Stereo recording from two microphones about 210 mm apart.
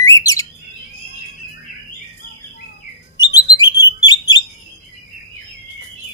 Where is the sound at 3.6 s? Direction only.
60° left (ahead or behind).